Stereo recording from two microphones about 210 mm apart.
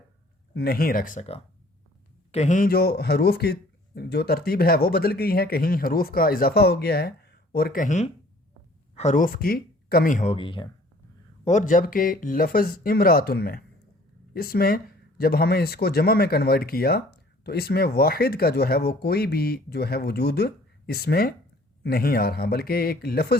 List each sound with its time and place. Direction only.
0.5 s speech: 45° left (ahead or behind)
2.3 s speech: 35° left (ahead or behind)
10.3 s speech: 25° left (ahead or behind)
11.4 s speech: 35° left (ahead or behind)